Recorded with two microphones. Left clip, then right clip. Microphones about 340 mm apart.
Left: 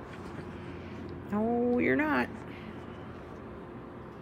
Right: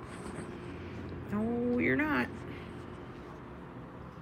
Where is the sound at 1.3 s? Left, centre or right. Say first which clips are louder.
Left 4 dB; centre.